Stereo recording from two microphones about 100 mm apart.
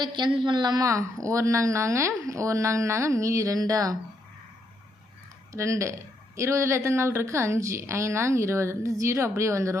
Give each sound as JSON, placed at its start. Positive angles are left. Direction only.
{"t": 0.3, "sound": "speech", "side_deg": -50}
{"t": 5.5, "sound": "speech", "side_deg": -30}